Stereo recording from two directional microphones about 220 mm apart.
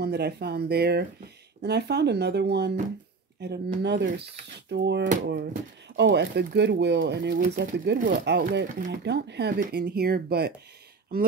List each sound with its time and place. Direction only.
0.0 s speech: 50° right (ahead or behind)